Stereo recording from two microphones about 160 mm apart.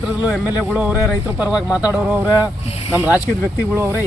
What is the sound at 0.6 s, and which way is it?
Speech, 5° right (ahead or behind).